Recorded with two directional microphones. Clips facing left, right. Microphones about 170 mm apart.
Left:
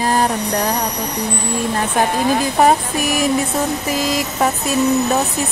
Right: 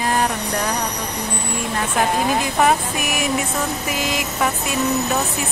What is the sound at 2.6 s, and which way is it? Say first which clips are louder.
Speech: left 4 dB; 35° left (ahead or behind).